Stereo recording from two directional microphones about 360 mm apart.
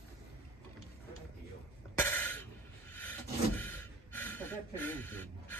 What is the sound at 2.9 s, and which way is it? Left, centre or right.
Rub, centre.